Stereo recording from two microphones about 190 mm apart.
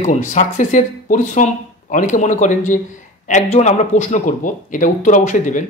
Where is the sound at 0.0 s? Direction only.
40° left (ahead or behind).